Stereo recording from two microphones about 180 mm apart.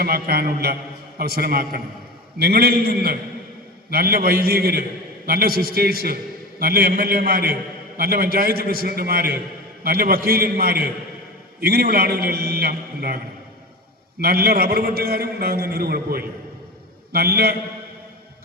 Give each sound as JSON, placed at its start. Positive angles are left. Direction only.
{"t": 0.0, "sound": "a man's voice", "side_deg": -55}